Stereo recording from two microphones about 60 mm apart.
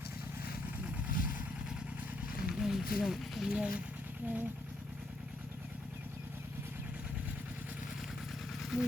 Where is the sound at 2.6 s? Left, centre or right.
Centre.